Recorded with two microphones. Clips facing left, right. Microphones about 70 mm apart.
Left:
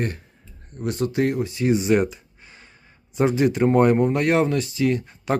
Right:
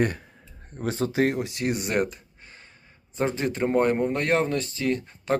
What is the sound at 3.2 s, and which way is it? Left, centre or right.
Speech, centre.